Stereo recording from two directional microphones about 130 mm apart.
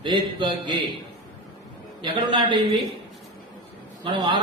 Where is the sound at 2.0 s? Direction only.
40° right (ahead or behind).